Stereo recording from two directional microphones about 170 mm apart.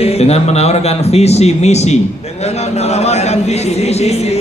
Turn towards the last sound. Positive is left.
turn(degrees=40)  # may be behind; listen again after turning